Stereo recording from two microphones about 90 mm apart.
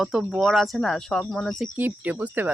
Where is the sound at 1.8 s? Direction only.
20° right (ahead or behind).